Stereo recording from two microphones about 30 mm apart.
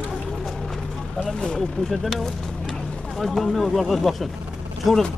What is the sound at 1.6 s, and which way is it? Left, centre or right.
Speech, centre.